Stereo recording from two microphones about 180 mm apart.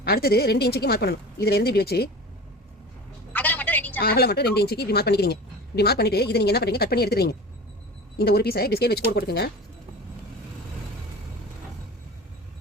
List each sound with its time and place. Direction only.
0.0 s a woman's voice: 60° left (ahead or behind)
3.3 s telephone: 10° left (ahead or behind)
4.0 s a woman's voice: 60° left (ahead or behind)